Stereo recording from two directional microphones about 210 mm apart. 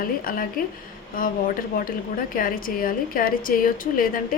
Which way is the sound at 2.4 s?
40° left (ahead or behind).